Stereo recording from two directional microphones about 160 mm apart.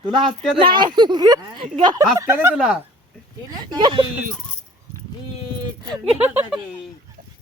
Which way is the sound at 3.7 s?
30° right (ahead or behind).